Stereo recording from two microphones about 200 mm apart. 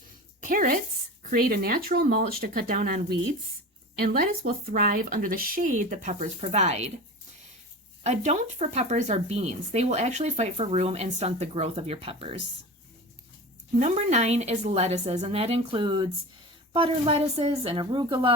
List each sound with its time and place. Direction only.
0.4 s speech: 40° right (ahead or behind)
4.0 s speech: 45° right (ahead or behind)
8.0 s speech: 35° right (ahead or behind)
13.7 s a woman's voice: 35° right (ahead or behind)